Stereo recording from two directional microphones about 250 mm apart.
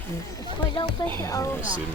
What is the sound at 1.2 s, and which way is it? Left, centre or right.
Speech, centre.